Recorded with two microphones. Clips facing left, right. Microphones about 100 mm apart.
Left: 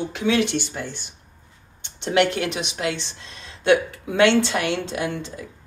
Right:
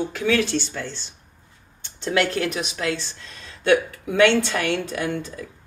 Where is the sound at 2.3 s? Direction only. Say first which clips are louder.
Right 1 dB; 25° left (ahead or behind).